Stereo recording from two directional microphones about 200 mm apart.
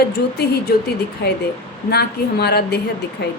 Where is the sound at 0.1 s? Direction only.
55° left (ahead or behind).